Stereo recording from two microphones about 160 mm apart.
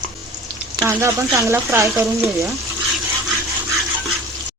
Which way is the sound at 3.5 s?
Centre (ahead or behind).